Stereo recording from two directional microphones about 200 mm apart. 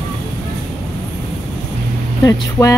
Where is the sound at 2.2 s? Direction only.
15° left (ahead or behind).